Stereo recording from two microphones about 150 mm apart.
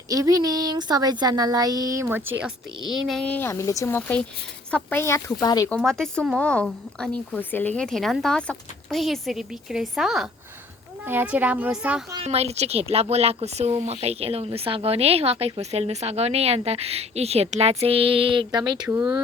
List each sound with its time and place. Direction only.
0.1 s speech: 25° right (ahead or behind)
2.8 s speech: 5° right (ahead or behind); by 5.6 s 25° left (ahead or behind)
5.6 s speech: 5° left (ahead or behind)
11.0 s a woman's voice: 15° right (ahead or behind)
12.2 s speech: 45° right (ahead or behind)